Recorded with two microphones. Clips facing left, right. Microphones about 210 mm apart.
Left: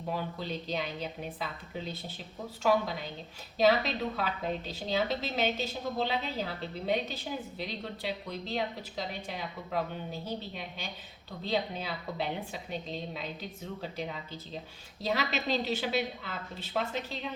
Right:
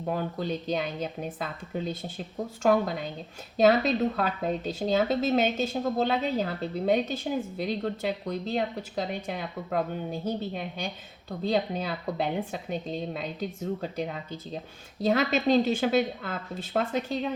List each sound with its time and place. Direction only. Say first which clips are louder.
0.0 s speech: right 5 dB; 50° right (ahead or behind)